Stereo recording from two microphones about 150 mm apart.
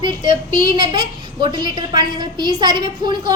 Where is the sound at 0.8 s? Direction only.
30° right (ahead or behind).